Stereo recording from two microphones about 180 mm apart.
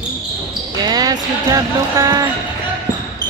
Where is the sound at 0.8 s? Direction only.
20° right (ahead or behind).